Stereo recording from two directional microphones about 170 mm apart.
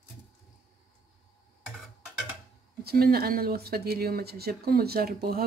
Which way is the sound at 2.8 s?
65° right (ahead or behind).